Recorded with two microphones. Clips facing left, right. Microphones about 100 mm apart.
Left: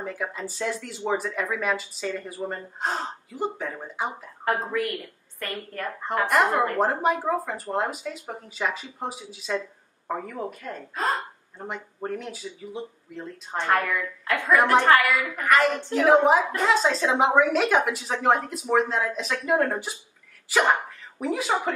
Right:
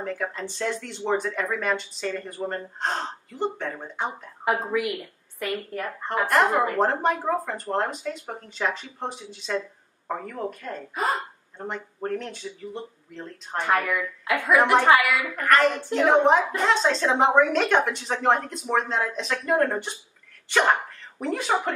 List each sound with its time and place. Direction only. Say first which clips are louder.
0.0 s a woman's voice: right 1 dB; 5° left (ahead or behind)
4.5 s a woman's voice: right 1 dB; 10° right (ahead or behind)